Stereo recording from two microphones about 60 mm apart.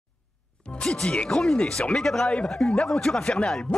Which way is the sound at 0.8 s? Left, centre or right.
Centre.